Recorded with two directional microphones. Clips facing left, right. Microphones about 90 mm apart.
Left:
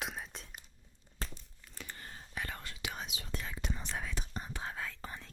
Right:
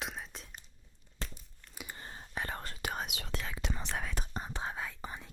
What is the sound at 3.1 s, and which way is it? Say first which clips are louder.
Whispering: right 2 dB; 80° right.